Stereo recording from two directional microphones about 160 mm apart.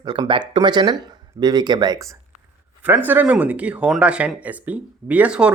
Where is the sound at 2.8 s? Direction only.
10° right (ahead or behind).